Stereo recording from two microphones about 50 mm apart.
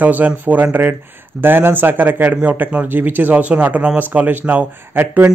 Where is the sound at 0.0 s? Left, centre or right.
Right.